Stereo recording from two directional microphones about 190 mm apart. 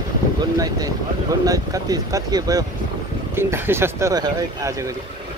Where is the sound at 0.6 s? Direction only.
20° right (ahead or behind).